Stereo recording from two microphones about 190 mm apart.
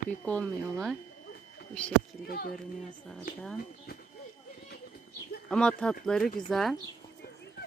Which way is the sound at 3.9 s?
55° left (ahead or behind).